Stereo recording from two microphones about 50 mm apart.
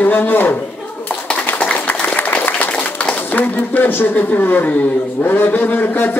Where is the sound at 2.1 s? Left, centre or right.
Left.